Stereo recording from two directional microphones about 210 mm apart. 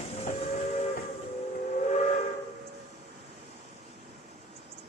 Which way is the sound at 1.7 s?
30° left (ahead or behind).